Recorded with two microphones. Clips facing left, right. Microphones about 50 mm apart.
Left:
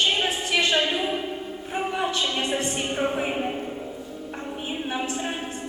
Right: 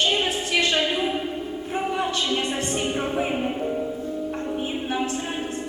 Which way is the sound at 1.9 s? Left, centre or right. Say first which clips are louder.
Right 1 dB; centre.